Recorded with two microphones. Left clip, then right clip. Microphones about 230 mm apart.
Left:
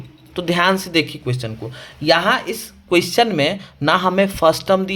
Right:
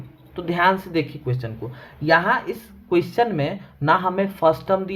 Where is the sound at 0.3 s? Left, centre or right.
Left.